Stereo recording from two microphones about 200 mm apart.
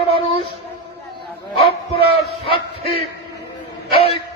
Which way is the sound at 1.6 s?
30° left (ahead or behind).